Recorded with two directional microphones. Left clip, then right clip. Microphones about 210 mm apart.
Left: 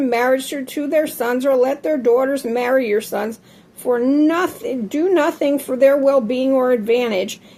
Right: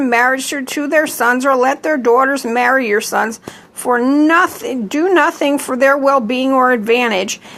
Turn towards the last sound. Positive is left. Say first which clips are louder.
# right 4 dB
turn(degrees=-15)  # may be behind; listen again after turning